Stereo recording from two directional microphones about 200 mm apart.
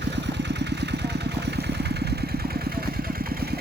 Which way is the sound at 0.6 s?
55° right (ahead or behind).